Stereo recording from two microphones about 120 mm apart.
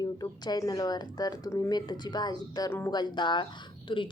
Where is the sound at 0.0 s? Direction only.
35° left (ahead or behind).